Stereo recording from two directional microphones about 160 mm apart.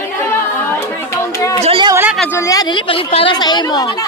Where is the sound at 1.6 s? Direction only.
35° right (ahead or behind).